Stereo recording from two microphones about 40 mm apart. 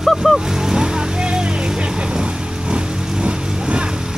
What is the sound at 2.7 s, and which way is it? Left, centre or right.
Vehicle, right.